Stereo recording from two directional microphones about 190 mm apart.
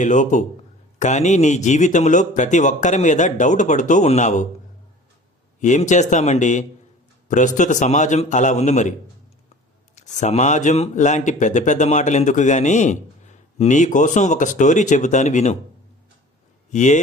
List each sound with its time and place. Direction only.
0.0 s speech: 40° left (ahead or behind)
5.5 s speech: 40° left (ahead or behind)
9.9 s speech: 40° left (ahead or behind)
16.7 s speech: 40° left (ahead or behind)